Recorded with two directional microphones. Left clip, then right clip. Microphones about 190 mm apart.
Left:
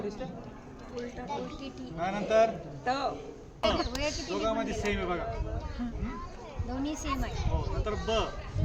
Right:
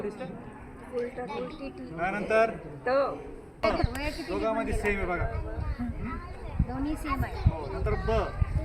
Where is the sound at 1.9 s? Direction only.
20° left (ahead or behind).